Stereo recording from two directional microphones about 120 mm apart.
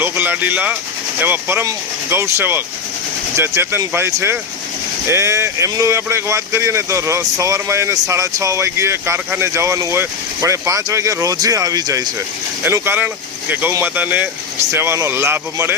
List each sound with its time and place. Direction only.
0.0 s speech: 15° right (ahead or behind); by 12.1 s 30° right (ahead or behind)
12.6 s speech: 20° right (ahead or behind)